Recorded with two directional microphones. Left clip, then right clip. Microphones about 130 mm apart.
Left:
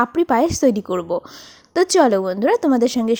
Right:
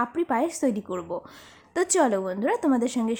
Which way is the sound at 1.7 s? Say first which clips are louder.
Left 8 dB; 30° left (ahead or behind).